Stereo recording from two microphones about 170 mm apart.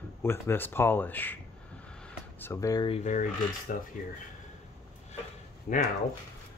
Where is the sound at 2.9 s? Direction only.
45° left (ahead or behind).